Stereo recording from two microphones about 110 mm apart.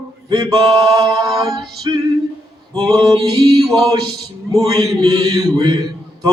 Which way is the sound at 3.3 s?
35° right (ahead or behind).